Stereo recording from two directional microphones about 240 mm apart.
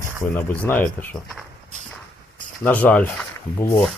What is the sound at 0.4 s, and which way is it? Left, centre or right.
Speech, centre.